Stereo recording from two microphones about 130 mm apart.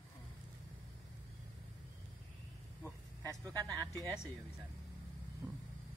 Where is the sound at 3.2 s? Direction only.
25° right (ahead or behind).